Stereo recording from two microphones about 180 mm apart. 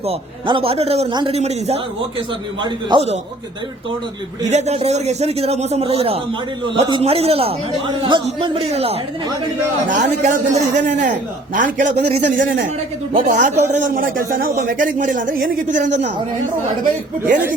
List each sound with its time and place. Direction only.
0.0 s a man's voice: 30° right (ahead or behind)
4.4 s a man's voice: 40° right (ahead or behind)